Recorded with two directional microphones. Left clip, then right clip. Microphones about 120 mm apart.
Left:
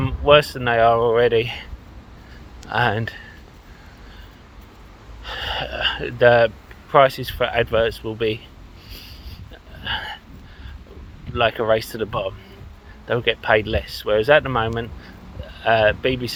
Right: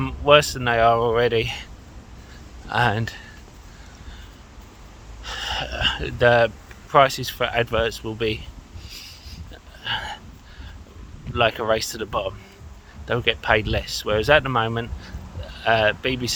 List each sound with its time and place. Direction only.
0.0 s speech: 30° right (ahead or behind)
2.6 s speech: 30° right (ahead or behind)
5.2 s gasp: 35° right (ahead or behind)
6.9 s speech: 30° right (ahead or behind)
8.9 s a sound: 40° right (ahead or behind)
9.8 s hiccup: 25° right (ahead or behind)
11.3 s speech: 35° right (ahead or behind)